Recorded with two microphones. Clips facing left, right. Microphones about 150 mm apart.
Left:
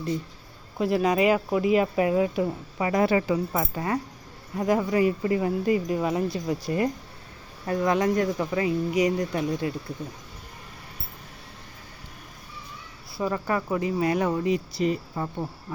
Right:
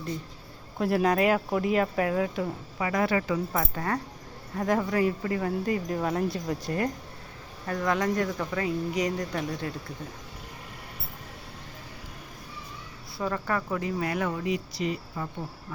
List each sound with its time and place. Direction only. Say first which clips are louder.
0.8 s speech: left 2 dB; centre (ahead or behind); by 3.3 s 25° left (ahead or behind)
3.5 s speech: left 2 dB; 10° left (ahead or behind)
7.7 s speech: left 4 dB; 20° left (ahead or behind)
13.1 s speech: left 3 dB; 15° left (ahead or behind); by 14.6 s 30° left (ahead or behind)
14.8 s speech: left 5 dB; 40° left (ahead or behind)